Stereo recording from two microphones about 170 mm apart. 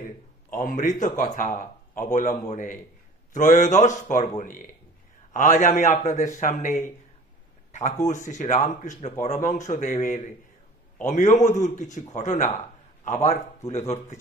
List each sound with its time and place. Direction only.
0.7 s a man's voice: 50° left (ahead or behind)